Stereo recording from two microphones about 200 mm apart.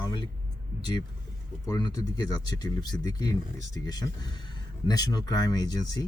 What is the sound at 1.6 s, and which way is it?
Speech, 15° left (ahead or behind).